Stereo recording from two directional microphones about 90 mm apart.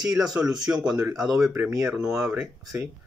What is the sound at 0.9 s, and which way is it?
Speech, 40° right (ahead or behind).